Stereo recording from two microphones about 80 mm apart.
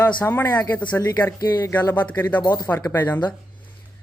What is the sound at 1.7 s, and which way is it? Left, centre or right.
Speech, left.